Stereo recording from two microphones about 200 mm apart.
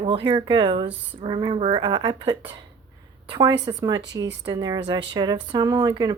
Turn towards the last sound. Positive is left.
turn(degrees=-20)  # may be behind; listen again after turning